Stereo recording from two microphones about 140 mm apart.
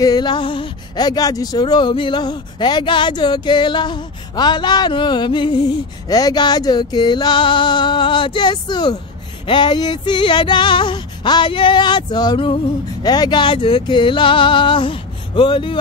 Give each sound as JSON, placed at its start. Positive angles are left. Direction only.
{"t": 0.0, "sound": "speech", "side_deg": 30}